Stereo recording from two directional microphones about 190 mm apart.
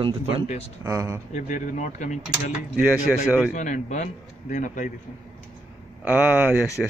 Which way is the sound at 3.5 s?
40° left (ahead or behind).